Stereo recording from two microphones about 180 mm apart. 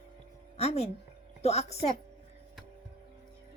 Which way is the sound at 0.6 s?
35° left (ahead or behind).